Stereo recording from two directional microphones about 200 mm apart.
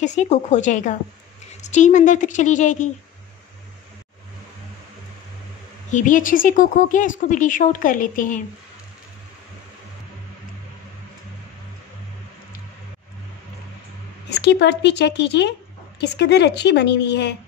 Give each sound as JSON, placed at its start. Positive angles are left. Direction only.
{"t": 0.0, "sound": "speech", "side_deg": 35}
{"t": 5.9, "sound": "speech", "side_deg": 40}
{"t": 14.3, "sound": "speech", "side_deg": 60}